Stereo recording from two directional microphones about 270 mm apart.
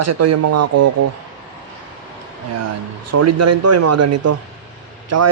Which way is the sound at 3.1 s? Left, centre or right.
Right.